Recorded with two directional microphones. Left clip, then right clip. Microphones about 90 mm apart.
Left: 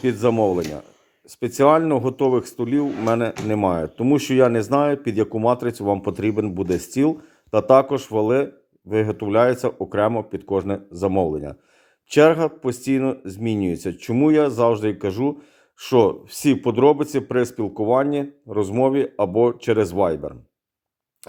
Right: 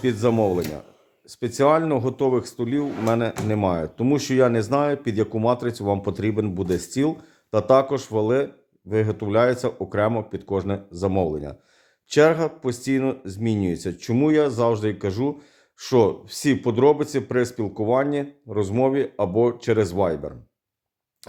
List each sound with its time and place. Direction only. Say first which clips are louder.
0.0 s speech: left 2 dB; 40° left (ahead or behind)
0.3 s speech: left 2 dB; 25° left (ahead or behind)
1.3 s speech: left 3 dB; 40° left (ahead or behind)